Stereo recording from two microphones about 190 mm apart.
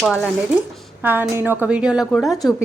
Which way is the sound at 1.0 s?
10° right (ahead or behind).